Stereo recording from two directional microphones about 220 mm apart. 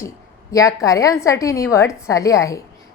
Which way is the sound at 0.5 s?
15° left (ahead or behind).